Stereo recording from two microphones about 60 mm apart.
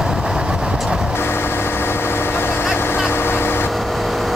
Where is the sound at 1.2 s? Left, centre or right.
Left.